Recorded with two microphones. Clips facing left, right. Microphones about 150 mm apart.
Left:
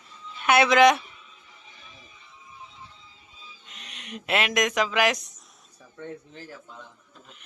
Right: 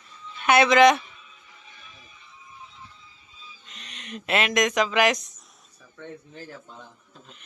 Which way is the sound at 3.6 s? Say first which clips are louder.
Right 2 dB; 10° left (ahead or behind).